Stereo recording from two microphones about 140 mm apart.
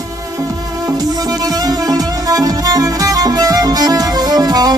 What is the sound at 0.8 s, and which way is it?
Music, 25° right (ahead or behind).